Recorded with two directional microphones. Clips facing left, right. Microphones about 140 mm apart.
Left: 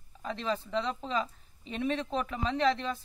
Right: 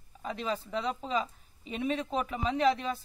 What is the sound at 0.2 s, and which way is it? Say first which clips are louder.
Speech: left 1 dB; 5° right (ahead or behind).